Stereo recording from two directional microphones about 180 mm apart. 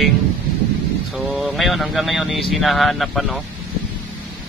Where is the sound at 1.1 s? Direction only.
Centre (ahead or behind).